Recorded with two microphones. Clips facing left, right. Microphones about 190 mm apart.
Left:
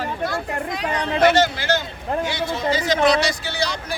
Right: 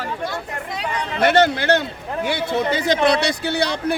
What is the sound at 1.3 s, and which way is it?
Speech, 60° right (ahead or behind).